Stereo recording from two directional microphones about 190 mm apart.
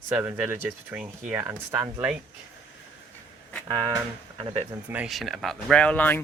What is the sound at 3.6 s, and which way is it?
Speech, 25° right (ahead or behind).